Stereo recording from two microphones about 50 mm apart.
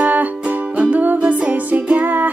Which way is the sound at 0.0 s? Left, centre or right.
Right.